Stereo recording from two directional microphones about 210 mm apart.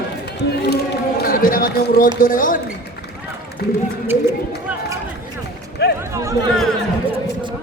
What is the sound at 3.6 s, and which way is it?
Speech, 50° left (ahead or behind).